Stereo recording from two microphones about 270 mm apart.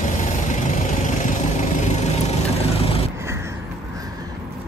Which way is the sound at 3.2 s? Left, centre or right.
Centre.